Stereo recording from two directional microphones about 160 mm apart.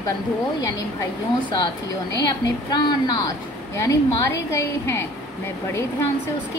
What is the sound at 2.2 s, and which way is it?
A woman's voice, 25° left (ahead or behind).